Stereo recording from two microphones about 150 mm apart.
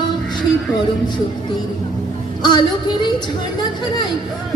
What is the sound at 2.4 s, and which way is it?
Music, 30° left (ahead or behind).